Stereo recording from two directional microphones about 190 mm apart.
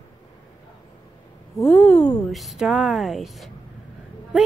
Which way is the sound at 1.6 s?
5° left (ahead or behind).